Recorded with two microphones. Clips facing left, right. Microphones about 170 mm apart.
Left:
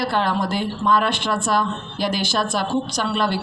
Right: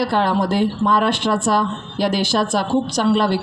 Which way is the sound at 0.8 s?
35° right (ahead or behind).